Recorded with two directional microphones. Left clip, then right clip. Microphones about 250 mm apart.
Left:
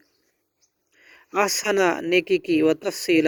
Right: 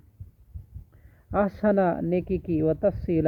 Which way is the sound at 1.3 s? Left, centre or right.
Left.